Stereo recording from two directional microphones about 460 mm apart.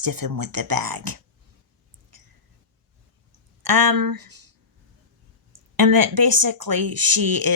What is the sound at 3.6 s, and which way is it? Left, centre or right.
Speech, right.